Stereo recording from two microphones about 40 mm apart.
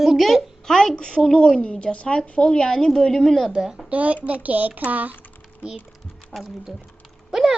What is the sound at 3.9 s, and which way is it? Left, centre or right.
A child's voice, right.